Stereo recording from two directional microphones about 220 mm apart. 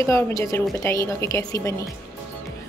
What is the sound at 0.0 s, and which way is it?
A woman's voice, 15° left (ahead or behind).